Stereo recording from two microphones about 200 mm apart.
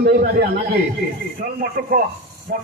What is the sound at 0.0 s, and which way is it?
Speech, 55° right (ahead or behind).